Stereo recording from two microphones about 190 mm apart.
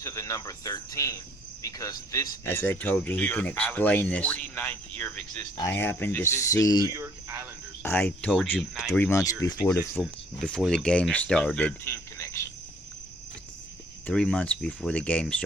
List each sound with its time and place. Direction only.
0.0 s speech: 15° left (ahead or behind)
6.8 s speech: 15° right (ahead or behind)
7.8 s speech: 10° left (ahead or behind)
8.9 s speech: 15° left (ahead or behind)
9.9 s speech: 5° left (ahead or behind)
14.1 s speech: 5° left (ahead or behind)